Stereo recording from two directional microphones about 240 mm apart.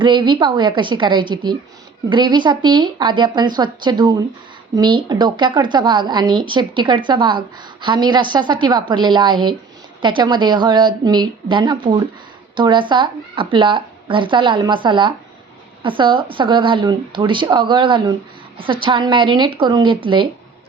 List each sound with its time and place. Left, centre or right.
0.0 s a woman's voice: centre